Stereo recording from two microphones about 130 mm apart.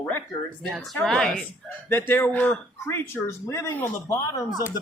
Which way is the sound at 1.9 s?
15° left (ahead or behind).